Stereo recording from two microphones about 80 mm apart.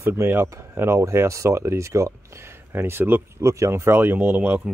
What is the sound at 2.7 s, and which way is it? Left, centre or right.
Speech, right.